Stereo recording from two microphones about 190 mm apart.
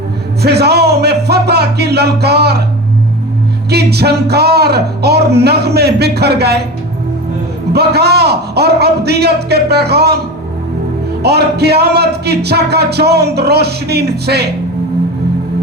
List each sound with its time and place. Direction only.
0.4 s speech: 60° right (ahead or behind)
3.7 s music: 60° right (ahead or behind)
7.7 s music: 60° right (ahead or behind)
11.2 s music: 60° right (ahead or behind)